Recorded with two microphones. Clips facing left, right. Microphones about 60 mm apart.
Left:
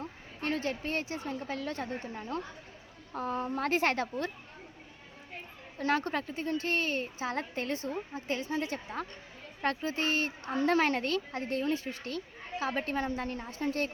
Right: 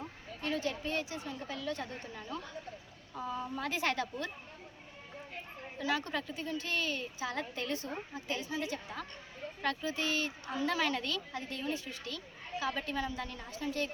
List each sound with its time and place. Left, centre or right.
0.4 s speech: left
3.1 s a woman's voice: left
5.8 s speech: left